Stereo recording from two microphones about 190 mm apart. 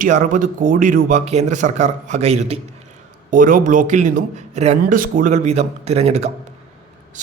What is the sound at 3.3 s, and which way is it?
A man's voice, 45° right (ahead or behind).